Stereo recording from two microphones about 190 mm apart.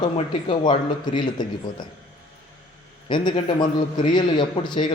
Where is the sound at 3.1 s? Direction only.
25° left (ahead or behind).